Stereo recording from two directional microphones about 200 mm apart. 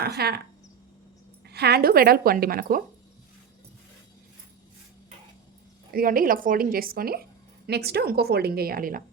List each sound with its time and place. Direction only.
0.0 s speech: 50° right (ahead or behind)
1.5 s speech: 55° right (ahead or behind)
5.9 s speech: 45° right (ahead or behind)